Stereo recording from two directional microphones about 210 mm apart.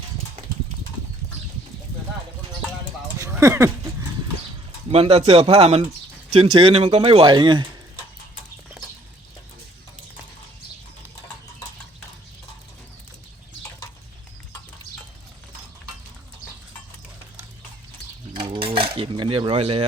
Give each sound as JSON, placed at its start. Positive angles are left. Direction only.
{"t": 3.2, "sound": "a sound", "side_deg": -15}
{"t": 4.9, "sound": "speech", "side_deg": -30}
{"t": 18.3, "sound": "cutlery", "side_deg": -25}